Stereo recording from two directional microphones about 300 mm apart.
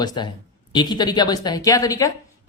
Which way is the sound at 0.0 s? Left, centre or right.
Centre.